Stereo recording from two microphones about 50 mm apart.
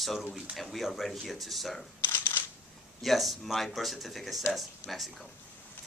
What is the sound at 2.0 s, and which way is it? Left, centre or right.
Camera, left.